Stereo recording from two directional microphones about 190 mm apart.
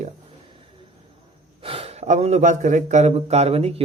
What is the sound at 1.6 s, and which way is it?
A man's voice, 30° right (ahead or behind).